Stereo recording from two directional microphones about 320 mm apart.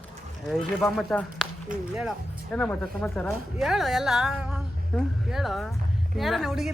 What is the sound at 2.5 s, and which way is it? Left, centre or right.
Speech, centre.